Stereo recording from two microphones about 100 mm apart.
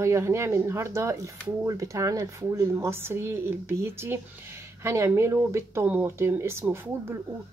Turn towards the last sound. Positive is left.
turn(degrees=-25)  # may be behind; listen again after turning